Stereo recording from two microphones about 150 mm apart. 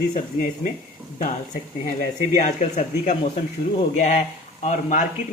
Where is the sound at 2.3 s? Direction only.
50° left (ahead or behind).